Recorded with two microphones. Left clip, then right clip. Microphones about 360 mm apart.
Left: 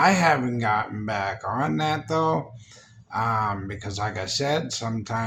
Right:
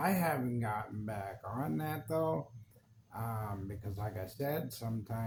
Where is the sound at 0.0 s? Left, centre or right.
Right.